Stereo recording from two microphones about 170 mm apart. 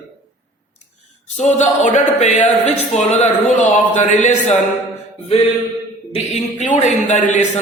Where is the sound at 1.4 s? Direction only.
45° left (ahead or behind).